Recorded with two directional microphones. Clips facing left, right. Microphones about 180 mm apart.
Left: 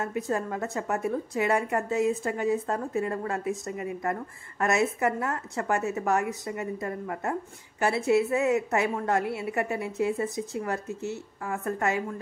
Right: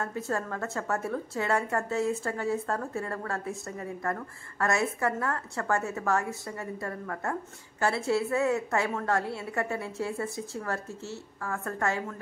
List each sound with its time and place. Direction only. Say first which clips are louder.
0.0 s a woman's voice: left 3 dB; 15° left (ahead or behind)